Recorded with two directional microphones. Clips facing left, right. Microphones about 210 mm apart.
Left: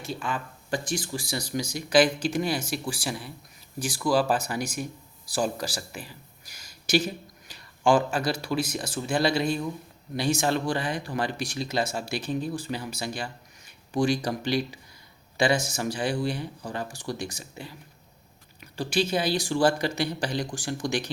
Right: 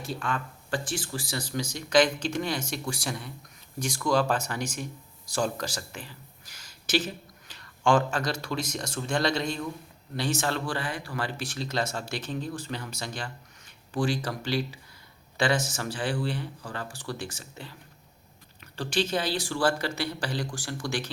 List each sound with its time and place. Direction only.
0.0 s speech: centre (ahead or behind)
0.7 s a man's voice: 15° left (ahead or behind)